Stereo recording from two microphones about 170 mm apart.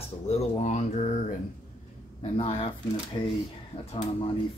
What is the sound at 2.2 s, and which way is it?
Speech, 35° left (ahead or behind).